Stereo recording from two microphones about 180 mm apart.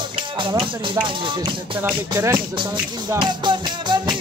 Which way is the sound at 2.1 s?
15° right (ahead or behind).